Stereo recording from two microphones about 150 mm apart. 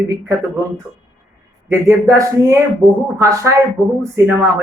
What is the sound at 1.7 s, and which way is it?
Speech, 15° right (ahead or behind).